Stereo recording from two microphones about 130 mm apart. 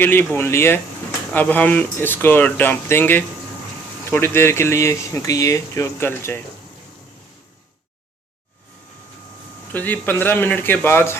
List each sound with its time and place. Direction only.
0.0 s speech: 15° left (ahead or behind)
9.7 s speech: 15° left (ahead or behind)